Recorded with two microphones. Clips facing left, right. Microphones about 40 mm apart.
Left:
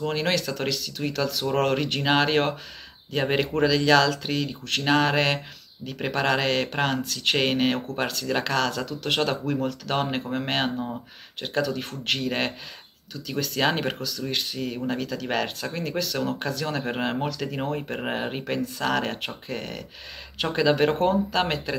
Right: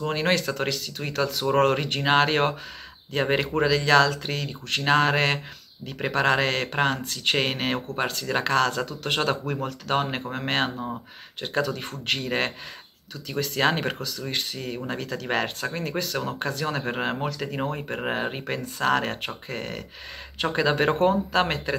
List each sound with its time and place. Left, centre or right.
0.3 s speech: right
8.5 s speech: right
9.8 s speech: centre
15.0 s speech: right
15.3 s speech: centre
16.6 s speech: centre